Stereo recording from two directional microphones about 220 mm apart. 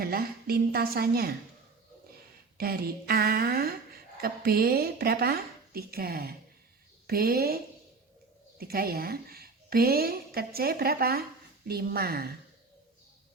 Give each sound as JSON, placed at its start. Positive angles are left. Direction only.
{"t": 0.0, "sound": "speech", "side_deg": -45}
{"t": 2.6, "sound": "speech", "side_deg": -45}